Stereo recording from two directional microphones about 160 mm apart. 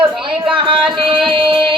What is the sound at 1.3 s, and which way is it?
Music, 30° right (ahead or behind).